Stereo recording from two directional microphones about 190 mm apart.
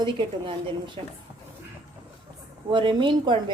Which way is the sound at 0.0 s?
25° right (ahead or behind).